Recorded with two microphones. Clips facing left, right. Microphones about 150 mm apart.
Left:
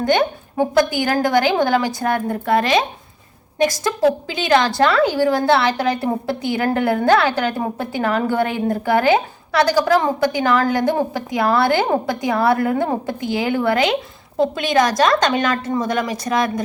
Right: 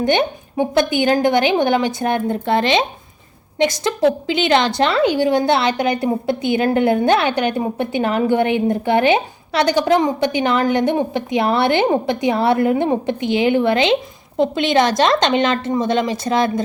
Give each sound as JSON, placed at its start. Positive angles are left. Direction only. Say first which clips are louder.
{"t": 0.0, "sound": "a woman's voice", "louder": "even", "side_deg": -25}